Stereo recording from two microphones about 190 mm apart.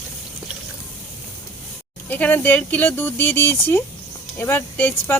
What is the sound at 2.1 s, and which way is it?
Speech, 10° left (ahead or behind).